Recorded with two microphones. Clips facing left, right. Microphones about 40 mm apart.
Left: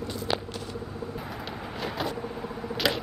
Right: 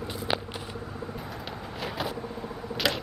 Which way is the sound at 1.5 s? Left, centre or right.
Centre.